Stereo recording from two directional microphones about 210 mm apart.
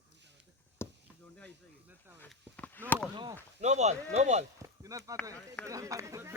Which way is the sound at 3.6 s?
35° right (ahead or behind).